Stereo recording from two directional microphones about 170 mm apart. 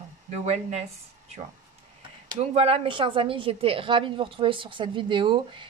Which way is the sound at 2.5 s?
35° right (ahead or behind).